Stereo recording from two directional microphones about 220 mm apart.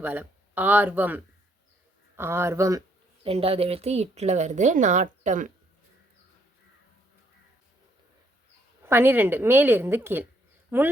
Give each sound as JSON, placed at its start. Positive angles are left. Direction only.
{"t": 0.0, "sound": "a woman's voice", "side_deg": -10}
{"t": 3.2, "sound": "speech", "side_deg": -25}
{"t": 8.8, "sound": "a woman's voice", "side_deg": -10}